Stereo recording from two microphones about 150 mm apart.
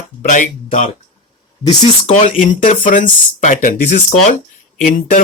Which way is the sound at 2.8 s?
60° left (ahead or behind).